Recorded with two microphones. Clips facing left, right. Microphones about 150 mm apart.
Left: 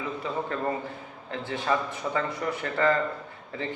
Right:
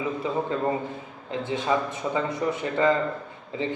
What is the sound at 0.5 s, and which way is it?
A man's voice, 15° right (ahead or behind).